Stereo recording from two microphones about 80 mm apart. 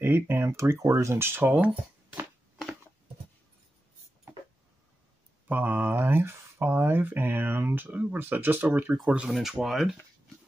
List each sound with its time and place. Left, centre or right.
0.0 s speech: right
5.5 s speech: right
9.3 s speech: centre